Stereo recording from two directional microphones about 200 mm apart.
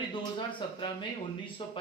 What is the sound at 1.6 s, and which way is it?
Speech, 25° left (ahead or behind).